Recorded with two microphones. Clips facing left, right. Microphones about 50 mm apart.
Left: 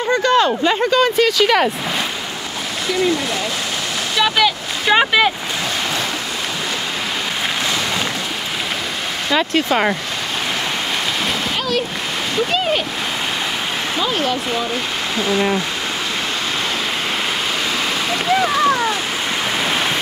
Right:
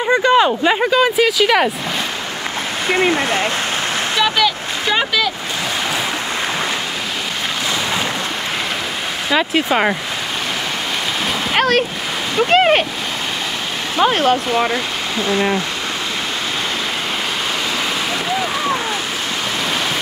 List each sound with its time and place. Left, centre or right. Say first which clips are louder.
0.1 s speech: right 2 dB; centre
2.9 s speech: right 3 dB; right
4.2 s vehicle: left 1 dB; centre
4.9 s speech: left 5 dB; left
9.3 s speech: right 1 dB; centre
11.5 s a sound: right 9 dB; right
12.4 s speech: right 10 dB; right
13.9 s speech: right 7 dB; right
15.1 s speech: even; centre